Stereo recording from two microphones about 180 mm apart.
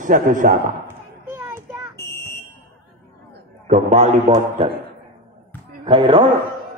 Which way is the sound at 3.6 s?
40° right (ahead or behind).